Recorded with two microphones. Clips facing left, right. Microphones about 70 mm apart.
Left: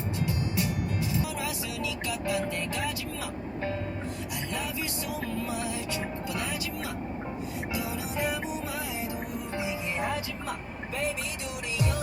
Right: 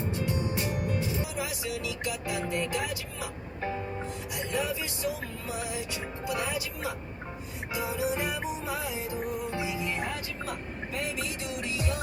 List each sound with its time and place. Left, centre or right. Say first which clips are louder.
0.1 s music: left 2 dB; right
2.2 s music: left 1 dB; right
6.2 s music: right 2 dB; right
7.9 s music: right 5 dB; right